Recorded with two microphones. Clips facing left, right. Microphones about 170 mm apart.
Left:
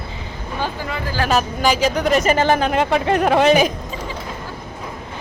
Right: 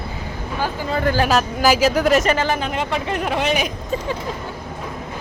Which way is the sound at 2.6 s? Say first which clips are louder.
Left 5 dB; 45° left (ahead or behind).